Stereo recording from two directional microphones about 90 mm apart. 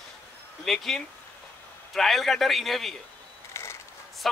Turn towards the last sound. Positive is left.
turn(degrees=0)  # may be behind; listen again after turning